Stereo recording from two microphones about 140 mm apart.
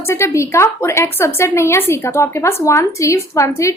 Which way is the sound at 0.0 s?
20° left (ahead or behind).